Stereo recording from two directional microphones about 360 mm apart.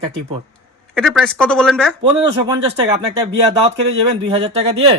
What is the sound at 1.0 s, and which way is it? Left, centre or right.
Speech, centre.